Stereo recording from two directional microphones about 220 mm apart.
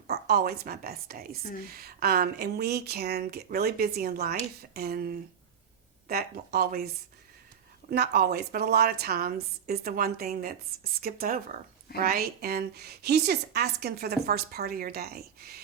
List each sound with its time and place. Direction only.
0.1 s a woman's voice: 45° right (ahead or behind)
7.9 s a woman's voice: 45° right (ahead or behind)